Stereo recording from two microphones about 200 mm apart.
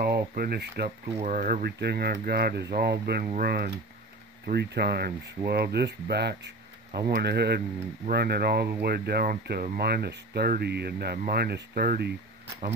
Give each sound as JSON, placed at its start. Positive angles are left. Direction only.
{"t": 0.3, "sound": "speech", "side_deg": -50}
{"t": 1.2, "sound": "speech", "side_deg": -40}